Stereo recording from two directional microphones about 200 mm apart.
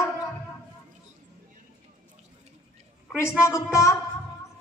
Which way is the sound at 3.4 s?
15° left (ahead or behind).